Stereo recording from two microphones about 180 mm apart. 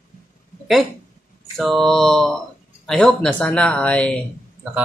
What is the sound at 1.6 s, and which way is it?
Speech, centre (ahead or behind).